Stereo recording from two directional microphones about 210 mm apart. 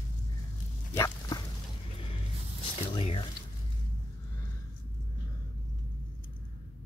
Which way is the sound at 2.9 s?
25° left (ahead or behind).